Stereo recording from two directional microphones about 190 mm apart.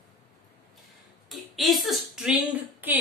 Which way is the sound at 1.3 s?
Centre (ahead or behind).